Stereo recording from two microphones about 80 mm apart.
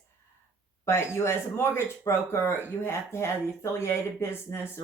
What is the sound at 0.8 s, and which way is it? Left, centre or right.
Speech, left.